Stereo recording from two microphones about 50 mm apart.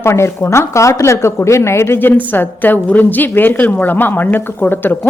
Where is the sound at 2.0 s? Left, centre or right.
Left.